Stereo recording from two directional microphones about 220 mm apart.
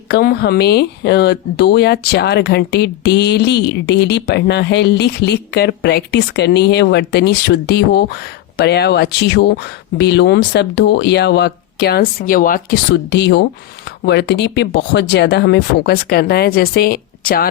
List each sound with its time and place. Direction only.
0.1 s speech: 45° left (ahead or behind)